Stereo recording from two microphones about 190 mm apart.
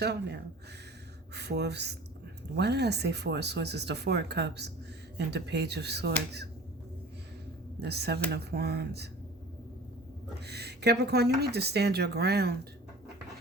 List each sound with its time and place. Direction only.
0.0 s speech: 60° right (ahead or behind)
7.8 s speech: 60° right (ahead or behind)
10.4 s speech: 60° right (ahead or behind)